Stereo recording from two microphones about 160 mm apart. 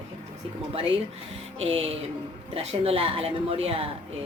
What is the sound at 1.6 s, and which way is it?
A woman's voice, 35° right (ahead or behind).